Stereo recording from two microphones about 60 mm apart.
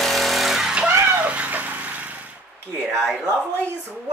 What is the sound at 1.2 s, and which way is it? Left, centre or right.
Cat, right.